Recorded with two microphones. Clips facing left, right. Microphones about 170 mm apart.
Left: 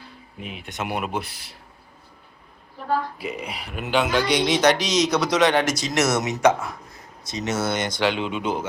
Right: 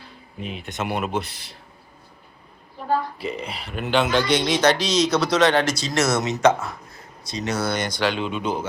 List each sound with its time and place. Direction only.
0.4 s speech: 10° left (ahead or behind)
3.2 s speech: 10° left (ahead or behind)